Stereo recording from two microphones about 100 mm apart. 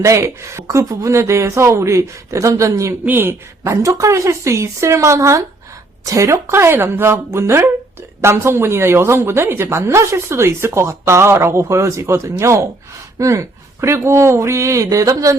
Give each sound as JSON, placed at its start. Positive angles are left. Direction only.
{"t": 0.0, "sound": "speech", "side_deg": -30}
{"t": 3.1, "sound": "a woman's voice", "side_deg": -20}